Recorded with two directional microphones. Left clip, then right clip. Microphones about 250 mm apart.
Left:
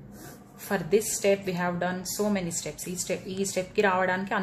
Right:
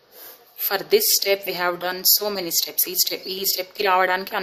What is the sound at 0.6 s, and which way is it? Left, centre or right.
A woman's voice, right.